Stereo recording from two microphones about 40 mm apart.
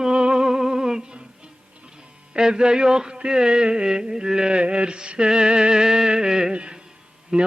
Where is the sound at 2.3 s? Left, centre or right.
Right.